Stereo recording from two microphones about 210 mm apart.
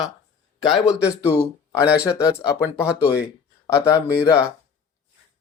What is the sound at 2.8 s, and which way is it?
Speech, 5° right (ahead or behind).